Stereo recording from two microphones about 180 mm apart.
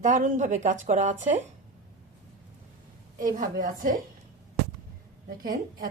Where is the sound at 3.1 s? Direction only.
50° right (ahead or behind).